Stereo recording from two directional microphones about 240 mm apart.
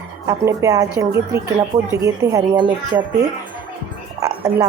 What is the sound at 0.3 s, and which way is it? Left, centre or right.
Speech, centre.